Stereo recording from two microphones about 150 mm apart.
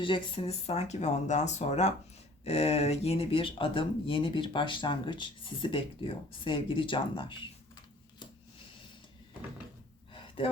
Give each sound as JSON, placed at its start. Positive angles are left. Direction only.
{"t": 0.0, "sound": "speech", "side_deg": 35}